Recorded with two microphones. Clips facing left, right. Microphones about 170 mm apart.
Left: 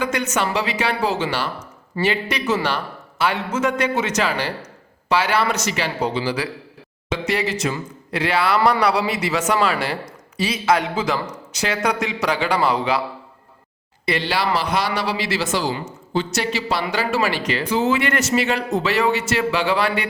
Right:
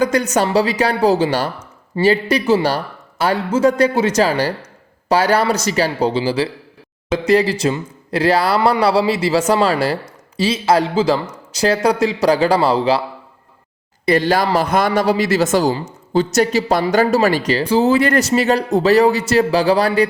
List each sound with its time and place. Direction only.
0.0 s speech: 35° right (ahead or behind)
1.5 s a sound: 30° right (ahead or behind)
2.3 s speech: 30° right (ahead or behind)
14.0 s speech: 45° right (ahead or behind)